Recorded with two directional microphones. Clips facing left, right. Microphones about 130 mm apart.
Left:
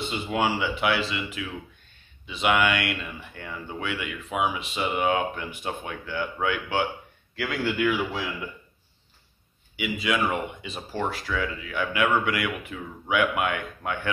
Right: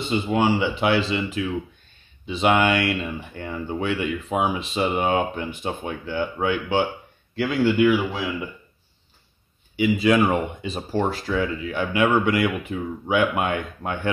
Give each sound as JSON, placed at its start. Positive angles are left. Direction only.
{"t": 0.3, "sound": "speech", "side_deg": -25}
{"t": 9.8, "sound": "speech", "side_deg": -35}